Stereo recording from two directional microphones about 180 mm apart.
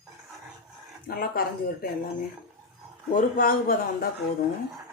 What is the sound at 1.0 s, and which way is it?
Speech, 55° left (ahead or behind).